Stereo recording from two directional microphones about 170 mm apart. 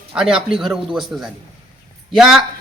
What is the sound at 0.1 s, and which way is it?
A man's voice, 5° right (ahead or behind).